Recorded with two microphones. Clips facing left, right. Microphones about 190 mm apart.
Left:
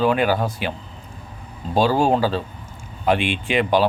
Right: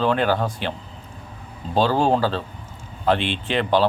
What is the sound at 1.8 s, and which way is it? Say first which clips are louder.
Speech: left 1 dB; 10° left (ahead or behind).